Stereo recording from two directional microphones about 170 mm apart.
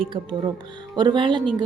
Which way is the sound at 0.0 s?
30° right (ahead or behind).